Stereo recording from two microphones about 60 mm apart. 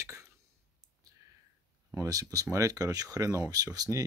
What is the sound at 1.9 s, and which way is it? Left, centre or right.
Speech, right.